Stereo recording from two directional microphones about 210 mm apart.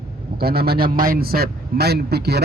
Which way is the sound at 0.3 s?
50° right (ahead or behind).